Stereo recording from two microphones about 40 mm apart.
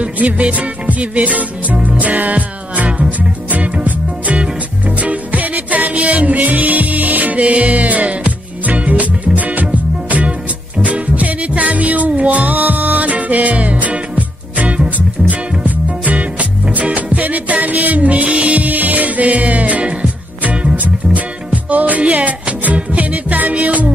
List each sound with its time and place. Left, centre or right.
0.0 s music: right
4.4 s music: right
20.7 s music: right